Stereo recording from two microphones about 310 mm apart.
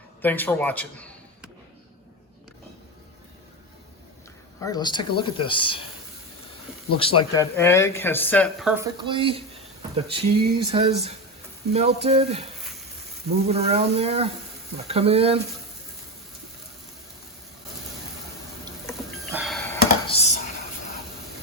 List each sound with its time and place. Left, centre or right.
0.2 s a man's voice: centre
4.6 s speech: centre
6.9 s speech: centre
18.9 s a sound: centre
20.1 s dishes: centre